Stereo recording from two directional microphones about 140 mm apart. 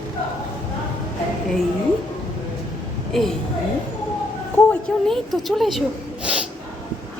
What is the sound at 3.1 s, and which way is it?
Speech, centre (ahead or behind).